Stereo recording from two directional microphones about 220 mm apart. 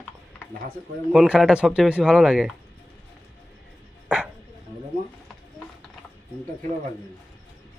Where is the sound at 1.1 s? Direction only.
5° right (ahead or behind).